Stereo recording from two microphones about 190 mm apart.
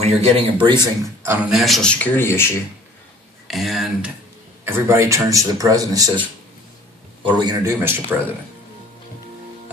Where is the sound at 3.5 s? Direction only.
Centre (ahead or behind).